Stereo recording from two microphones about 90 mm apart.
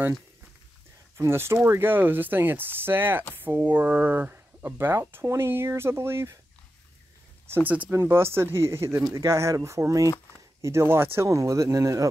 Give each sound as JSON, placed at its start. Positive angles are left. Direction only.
{"t": 1.1, "sound": "speech", "side_deg": -30}
{"t": 7.5, "sound": "speech", "side_deg": -15}